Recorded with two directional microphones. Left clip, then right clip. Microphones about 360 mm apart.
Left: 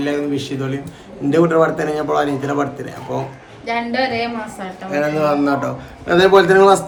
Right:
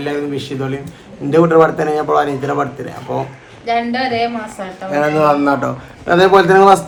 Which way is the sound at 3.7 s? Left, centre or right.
Centre.